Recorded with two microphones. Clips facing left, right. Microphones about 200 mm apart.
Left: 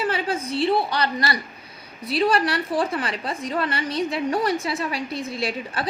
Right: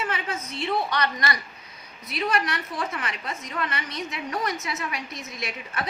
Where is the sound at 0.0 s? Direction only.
30° left (ahead or behind).